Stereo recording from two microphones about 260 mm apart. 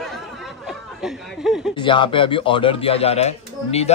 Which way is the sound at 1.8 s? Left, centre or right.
Centre.